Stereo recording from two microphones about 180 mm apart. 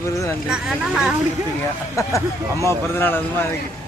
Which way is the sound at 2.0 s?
20° left (ahead or behind).